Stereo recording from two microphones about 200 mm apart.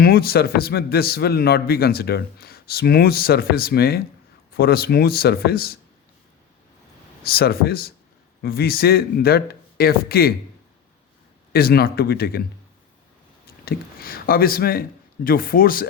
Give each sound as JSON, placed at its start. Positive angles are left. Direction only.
{"t": 0.0, "sound": "a man's voice", "side_deg": 50}
{"t": 7.3, "sound": "a man's voice", "side_deg": 50}
{"t": 11.5, "sound": "a man's voice", "side_deg": 50}
{"t": 13.7, "sound": "speech", "side_deg": 45}